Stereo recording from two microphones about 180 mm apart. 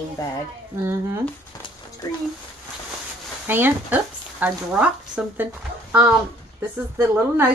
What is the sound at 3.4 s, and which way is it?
A woman's voice, 10° right (ahead or behind).